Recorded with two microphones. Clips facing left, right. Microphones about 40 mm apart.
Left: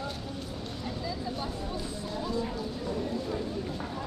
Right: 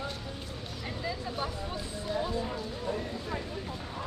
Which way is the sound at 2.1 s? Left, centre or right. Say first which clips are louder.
Right 2 dB; right.